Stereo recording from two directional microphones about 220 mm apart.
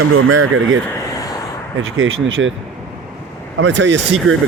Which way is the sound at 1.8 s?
65° right (ahead or behind).